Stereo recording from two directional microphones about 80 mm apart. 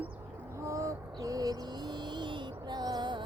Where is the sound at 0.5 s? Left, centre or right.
Right.